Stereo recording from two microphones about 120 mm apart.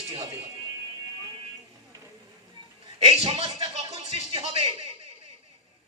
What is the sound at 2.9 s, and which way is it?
A man's voice, 55° right (ahead or behind).